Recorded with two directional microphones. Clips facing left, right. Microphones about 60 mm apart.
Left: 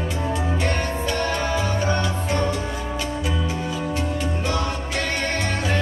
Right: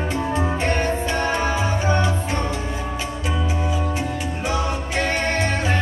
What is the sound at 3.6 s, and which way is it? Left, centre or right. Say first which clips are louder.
Music: right 1 dB; centre.